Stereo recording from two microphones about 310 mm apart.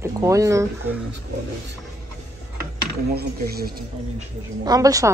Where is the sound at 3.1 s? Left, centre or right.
Right.